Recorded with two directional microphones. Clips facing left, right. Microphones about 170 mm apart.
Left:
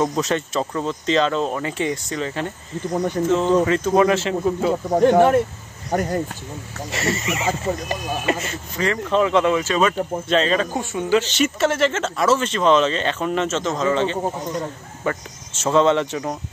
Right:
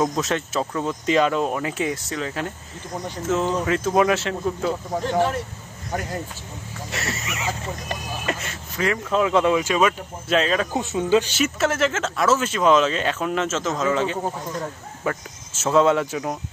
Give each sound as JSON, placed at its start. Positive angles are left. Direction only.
{"t": 0.0, "sound": "speech", "side_deg": 0}
{"t": 5.0, "sound": "speech", "side_deg": 55}
{"t": 5.9, "sound": "speech", "side_deg": 40}
{"t": 6.9, "sound": "speech", "side_deg": 0}
{"t": 10.7, "sound": "speech", "side_deg": -20}